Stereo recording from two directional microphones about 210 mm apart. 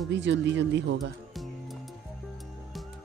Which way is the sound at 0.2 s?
60° right (ahead or behind).